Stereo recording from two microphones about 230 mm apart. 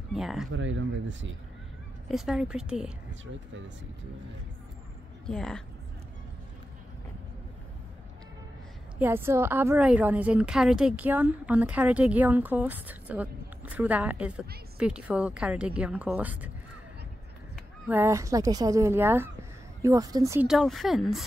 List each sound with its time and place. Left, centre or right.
0.1 s speech: centre
0.5 s speech: right
2.0 s a woman's voice: centre
5.2 s speech: centre
9.0 s a woman's voice: centre
17.8 s a woman's voice: centre
20.4 s a woman's voice: centre